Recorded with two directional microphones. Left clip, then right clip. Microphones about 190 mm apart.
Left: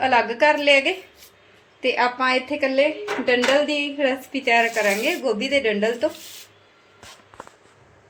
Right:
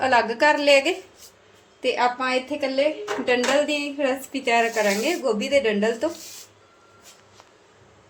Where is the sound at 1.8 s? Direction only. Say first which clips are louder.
Left 2 dB; 10° left (ahead or behind).